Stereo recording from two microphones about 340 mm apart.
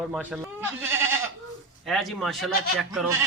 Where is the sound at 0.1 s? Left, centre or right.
Centre.